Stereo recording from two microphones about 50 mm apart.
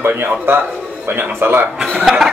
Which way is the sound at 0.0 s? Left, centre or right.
Right.